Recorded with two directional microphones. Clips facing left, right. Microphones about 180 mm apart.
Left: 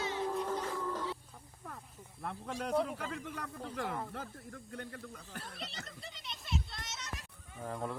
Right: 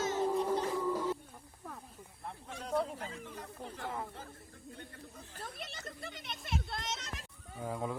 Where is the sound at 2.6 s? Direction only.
65° left (ahead or behind).